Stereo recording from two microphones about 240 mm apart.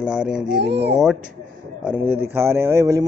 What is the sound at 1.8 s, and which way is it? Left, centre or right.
Speech, centre.